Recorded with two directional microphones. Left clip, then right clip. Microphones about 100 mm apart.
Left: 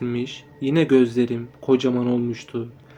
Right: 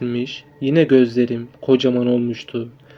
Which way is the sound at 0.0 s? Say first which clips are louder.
Right 3 dB; 25° right (ahead or behind).